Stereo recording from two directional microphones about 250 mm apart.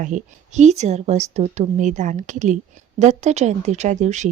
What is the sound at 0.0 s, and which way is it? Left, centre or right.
A woman's voice, right.